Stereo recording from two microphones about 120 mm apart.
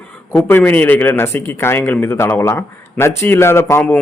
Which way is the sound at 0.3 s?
15° left (ahead or behind).